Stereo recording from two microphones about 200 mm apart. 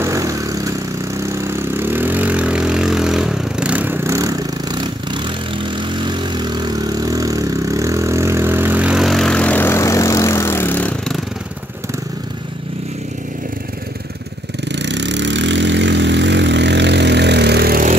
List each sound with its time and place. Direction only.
0.0 s vehicle: 15° right (ahead or behind); by 11.1 s 5° left (ahead or behind)
14.6 s vehicle: 60° right (ahead or behind)